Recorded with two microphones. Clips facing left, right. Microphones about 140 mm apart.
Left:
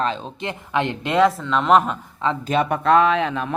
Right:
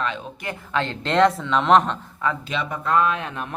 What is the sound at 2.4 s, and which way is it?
Speech, 45° left (ahead or behind).